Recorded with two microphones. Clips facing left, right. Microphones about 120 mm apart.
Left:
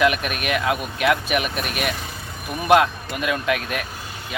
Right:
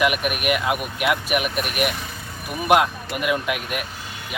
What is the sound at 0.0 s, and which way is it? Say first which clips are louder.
Speech: left 1 dB; 10° right (ahead or behind).